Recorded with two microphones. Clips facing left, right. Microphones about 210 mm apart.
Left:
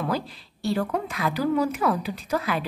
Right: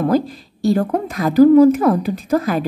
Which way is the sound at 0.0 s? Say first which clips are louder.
Right 11 dB; 45° right (ahead or behind).